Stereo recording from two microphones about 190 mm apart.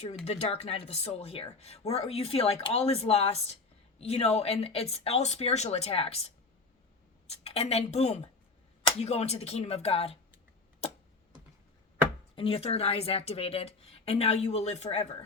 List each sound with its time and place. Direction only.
0.3 s speech: 30° left (ahead or behind)
10.8 s tick-tock: 35° left (ahead or behind)
12.4 s speech: 30° left (ahead or behind)